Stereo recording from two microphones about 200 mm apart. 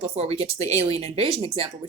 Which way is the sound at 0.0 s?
30° right (ahead or behind).